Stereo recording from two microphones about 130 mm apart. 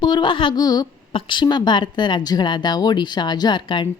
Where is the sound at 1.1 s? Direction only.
40° left (ahead or behind).